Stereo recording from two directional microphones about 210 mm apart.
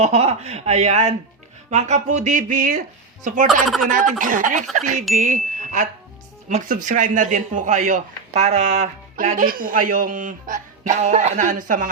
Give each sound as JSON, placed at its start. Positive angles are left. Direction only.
{"t": 0.0, "sound": "speech", "side_deg": -30}
{"t": 3.4, "sound": "speech", "side_deg": 0}
{"t": 3.8, "sound": "speech", "side_deg": -40}